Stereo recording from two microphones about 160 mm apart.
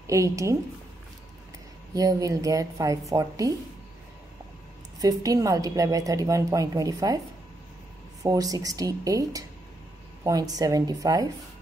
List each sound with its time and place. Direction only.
0.0 s a woman's voice: 20° right (ahead or behind)
2.0 s a woman's voice: 20° right (ahead or behind)
5.0 s a woman's voice: 20° right (ahead or behind)
8.2 s a woman's voice: 20° right (ahead or behind)
10.5 s a woman's voice: 20° right (ahead or behind)